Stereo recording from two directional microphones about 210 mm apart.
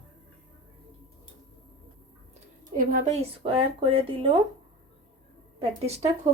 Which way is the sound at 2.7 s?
35° right (ahead or behind).